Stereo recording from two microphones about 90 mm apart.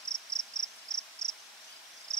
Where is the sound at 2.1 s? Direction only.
5° left (ahead or behind).